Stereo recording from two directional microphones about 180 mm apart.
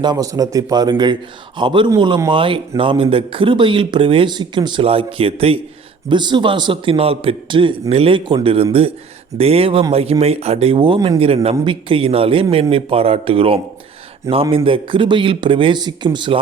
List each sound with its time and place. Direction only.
0.0 s speech: 20° right (ahead or behind)